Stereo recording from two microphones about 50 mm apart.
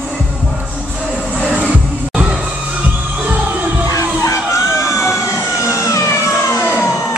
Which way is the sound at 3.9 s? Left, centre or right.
Left.